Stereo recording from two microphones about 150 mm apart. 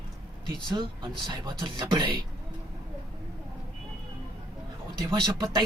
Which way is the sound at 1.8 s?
30° right (ahead or behind).